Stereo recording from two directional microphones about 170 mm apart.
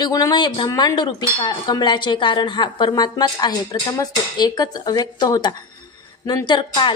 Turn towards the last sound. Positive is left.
turn(degrees=30)  # may be behind; listen again after turning